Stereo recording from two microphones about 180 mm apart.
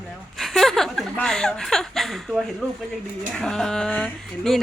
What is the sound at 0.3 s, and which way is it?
Speech, centre (ahead or behind).